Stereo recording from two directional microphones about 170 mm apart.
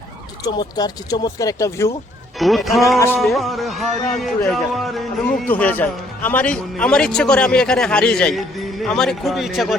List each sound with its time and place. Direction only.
0.4 s speech: 25° left (ahead or behind)
2.4 s a man's voice: centre (ahead or behind)